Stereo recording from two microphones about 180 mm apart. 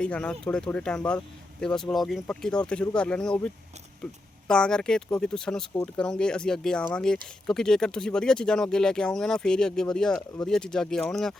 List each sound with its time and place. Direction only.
0.0 s speech: 5° left (ahead or behind)